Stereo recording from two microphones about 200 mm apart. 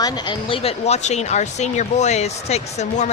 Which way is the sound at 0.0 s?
25° left (ahead or behind).